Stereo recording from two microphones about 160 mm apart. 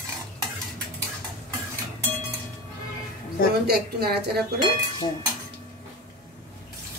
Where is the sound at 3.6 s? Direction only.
80° right.